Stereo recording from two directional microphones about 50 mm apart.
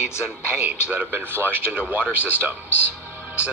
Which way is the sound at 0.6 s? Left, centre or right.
Right.